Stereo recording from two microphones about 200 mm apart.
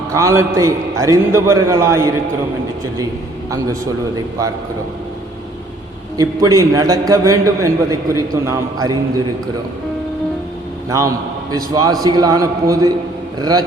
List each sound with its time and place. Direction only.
0.1 s a man's voice: 15° right (ahead or behind)
6.1 s a man's voice: 20° right (ahead or behind)
10.8 s a man's voice: 15° right (ahead or behind)